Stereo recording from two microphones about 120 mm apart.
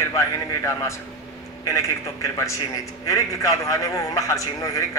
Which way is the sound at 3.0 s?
25° left (ahead or behind).